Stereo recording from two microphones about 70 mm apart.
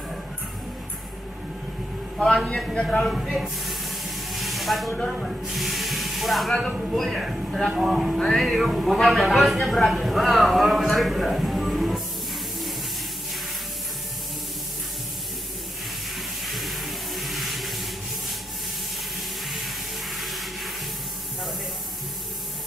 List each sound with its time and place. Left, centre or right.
2.2 s speech: centre
4.3 s hiss: centre
5.2 s a man's voice: centre
16.4 s a sound: centre
20.2 s sanding: centre